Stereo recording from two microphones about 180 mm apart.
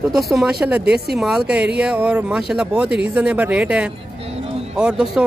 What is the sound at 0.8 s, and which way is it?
Speech, 65° right (ahead or behind).